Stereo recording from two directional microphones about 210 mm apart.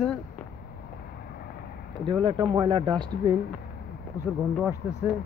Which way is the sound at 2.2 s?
20° right (ahead or behind).